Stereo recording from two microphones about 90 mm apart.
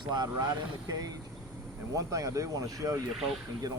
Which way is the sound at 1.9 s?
40° right (ahead or behind).